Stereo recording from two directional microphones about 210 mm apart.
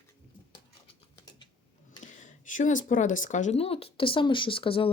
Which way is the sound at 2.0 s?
40° left (ahead or behind).